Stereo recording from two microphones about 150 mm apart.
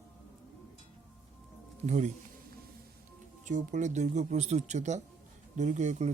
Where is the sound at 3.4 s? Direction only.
55° right (ahead or behind).